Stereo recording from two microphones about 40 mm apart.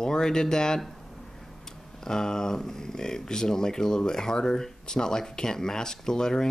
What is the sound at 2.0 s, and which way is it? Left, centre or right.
Speech, centre.